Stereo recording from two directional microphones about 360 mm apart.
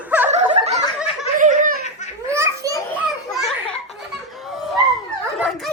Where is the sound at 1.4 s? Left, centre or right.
Right.